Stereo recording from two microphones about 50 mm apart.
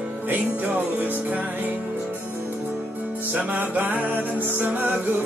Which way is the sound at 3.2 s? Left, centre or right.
Right.